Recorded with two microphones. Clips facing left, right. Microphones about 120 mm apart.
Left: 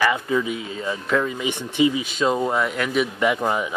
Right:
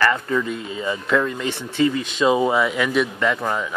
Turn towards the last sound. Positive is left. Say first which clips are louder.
# left 1 dB
turn(degrees=15)  # may be behind; listen again after turning